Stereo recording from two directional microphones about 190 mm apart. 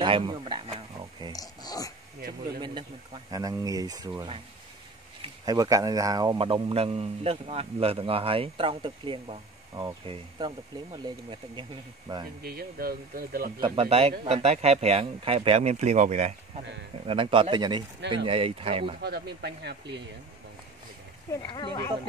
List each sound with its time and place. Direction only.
0.0 s speech: 25° right (ahead or behind)
1.3 s speech: 20° left (ahead or behind)
2.6 s speech: 25° right (ahead or behind)
12.4 s speech: 50° right (ahead or behind)
13.6 s speech: 25° right (ahead or behind)
18.9 s speech: 60° right (ahead or behind)
21.5 s speech: 25° left (ahead or behind)